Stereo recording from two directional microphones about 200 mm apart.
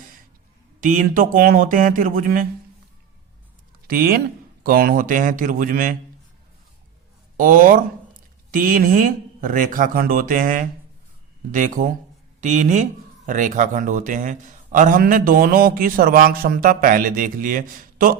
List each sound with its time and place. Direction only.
0.8 s speech: 40° right (ahead or behind)
3.8 s speech: 50° right (ahead or behind)
7.3 s speech: 40° right (ahead or behind)